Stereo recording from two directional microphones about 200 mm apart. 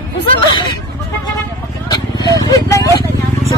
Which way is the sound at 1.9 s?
20° left (ahead or behind).